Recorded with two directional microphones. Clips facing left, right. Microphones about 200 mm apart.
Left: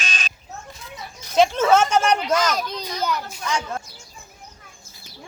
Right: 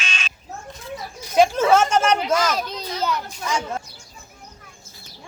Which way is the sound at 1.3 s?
10° right (ahead or behind).